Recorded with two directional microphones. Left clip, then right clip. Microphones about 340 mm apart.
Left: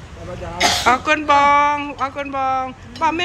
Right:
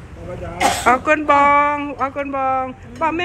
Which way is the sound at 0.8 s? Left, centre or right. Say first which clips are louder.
Right 2 dB; centre.